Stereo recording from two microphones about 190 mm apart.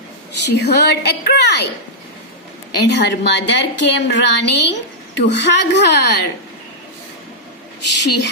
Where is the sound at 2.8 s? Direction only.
65° left (ahead or behind).